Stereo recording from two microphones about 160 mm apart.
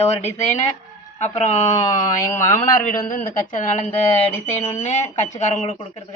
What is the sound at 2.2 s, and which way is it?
Speech, 15° left (ahead or behind).